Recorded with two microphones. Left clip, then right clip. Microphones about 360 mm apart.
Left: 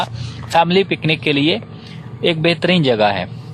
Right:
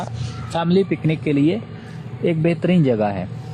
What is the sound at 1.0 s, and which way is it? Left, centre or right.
A man's voice, left.